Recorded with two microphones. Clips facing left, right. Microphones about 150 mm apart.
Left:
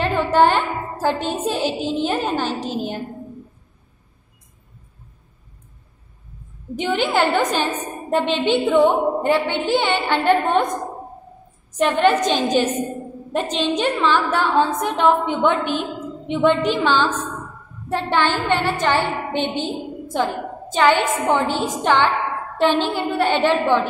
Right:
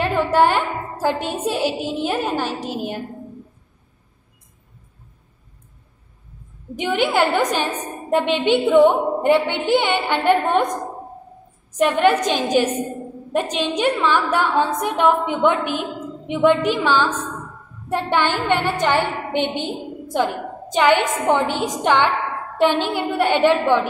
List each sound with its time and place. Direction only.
0.0 s a woman's voice: 10° right (ahead or behind)
6.8 s a woman's voice: 10° right (ahead or behind)
11.7 s a woman's voice: 10° right (ahead or behind)